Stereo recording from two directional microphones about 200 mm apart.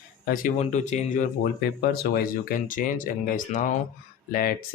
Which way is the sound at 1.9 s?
50° left (ahead or behind).